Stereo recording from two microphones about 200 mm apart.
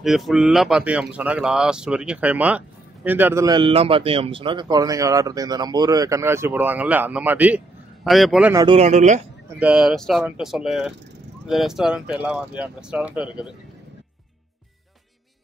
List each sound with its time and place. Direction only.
0.0 s speech: centre (ahead or behind)
8.7 s a man's voice: 35° right (ahead or behind)
9.6 s speech: 5° right (ahead or behind)